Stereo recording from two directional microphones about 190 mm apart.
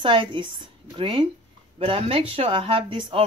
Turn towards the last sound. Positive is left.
turn(degrees=-30)  # may be behind; listen again after turning